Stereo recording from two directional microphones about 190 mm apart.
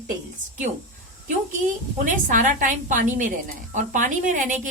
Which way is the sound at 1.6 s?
40° right (ahead or behind).